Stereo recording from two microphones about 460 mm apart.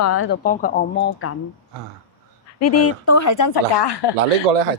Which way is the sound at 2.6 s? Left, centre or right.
Left.